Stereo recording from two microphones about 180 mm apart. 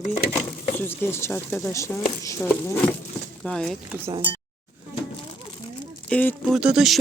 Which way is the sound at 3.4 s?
Centre (ahead or behind).